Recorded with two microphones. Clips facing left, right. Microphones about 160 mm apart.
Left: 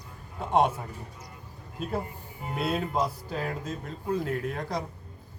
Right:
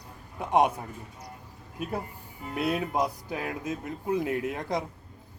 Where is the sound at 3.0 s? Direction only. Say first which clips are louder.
Even; 15° right (ahead or behind).